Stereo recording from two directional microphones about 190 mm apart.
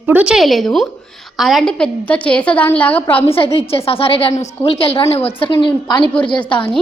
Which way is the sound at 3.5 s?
30° left (ahead or behind).